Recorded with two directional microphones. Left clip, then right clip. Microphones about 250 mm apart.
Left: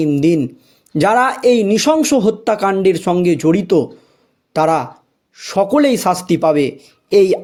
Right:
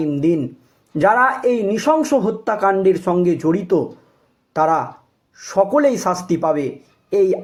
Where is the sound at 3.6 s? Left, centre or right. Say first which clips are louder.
Left 4 dB; left.